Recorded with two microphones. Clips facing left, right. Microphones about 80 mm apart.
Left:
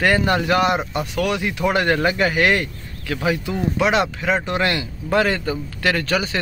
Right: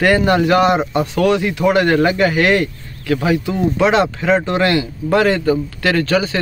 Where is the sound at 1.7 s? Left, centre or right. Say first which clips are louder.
Right 5 dB; left.